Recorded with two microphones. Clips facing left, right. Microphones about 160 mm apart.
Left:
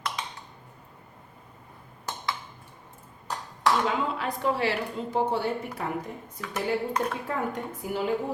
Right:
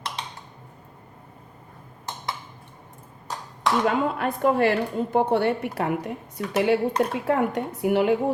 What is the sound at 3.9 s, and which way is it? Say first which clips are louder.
A woman's voice: right 5 dB; 55° right (ahead or behind).